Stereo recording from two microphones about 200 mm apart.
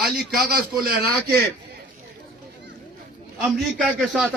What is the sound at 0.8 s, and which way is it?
Speech, 50° right (ahead or behind).